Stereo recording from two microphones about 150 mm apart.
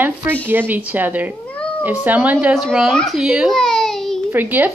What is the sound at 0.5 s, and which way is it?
A child's voice, 15° right (ahead or behind).